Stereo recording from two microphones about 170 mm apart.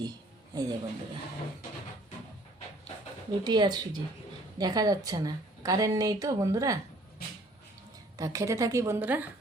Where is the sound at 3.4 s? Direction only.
25° right (ahead or behind).